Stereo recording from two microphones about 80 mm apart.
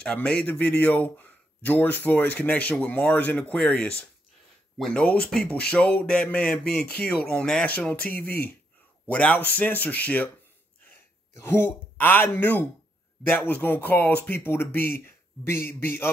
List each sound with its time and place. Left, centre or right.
0.0 s a man's voice: centre
3.5 s speech: centre
7.7 s a man's voice: centre
11.3 s a man's voice: left